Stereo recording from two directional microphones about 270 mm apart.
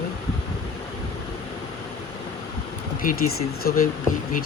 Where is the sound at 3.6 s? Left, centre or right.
Left.